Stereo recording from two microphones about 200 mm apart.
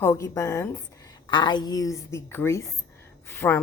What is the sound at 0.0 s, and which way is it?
A woman's voice, 15° left (ahead or behind).